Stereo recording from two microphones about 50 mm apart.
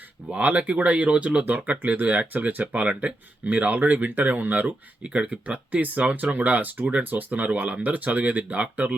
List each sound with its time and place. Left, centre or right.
0.3 s speech: right
1.5 s speech: right
5.0 s speech: right